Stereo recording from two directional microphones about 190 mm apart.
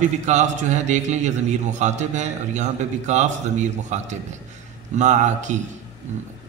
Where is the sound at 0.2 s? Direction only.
40° right (ahead or behind).